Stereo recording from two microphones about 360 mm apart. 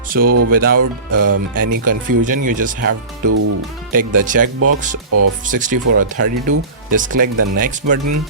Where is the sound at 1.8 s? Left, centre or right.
Right.